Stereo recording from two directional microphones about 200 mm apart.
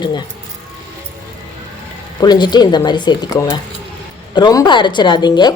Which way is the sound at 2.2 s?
20° left (ahead or behind).